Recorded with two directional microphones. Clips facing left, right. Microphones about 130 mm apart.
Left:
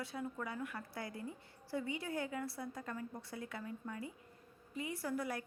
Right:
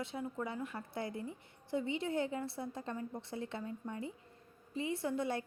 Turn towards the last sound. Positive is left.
turn(degrees=-25)  # may be behind; listen again after turning